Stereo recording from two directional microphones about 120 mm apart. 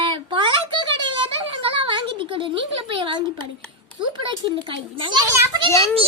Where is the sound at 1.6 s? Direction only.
45° right (ahead or behind).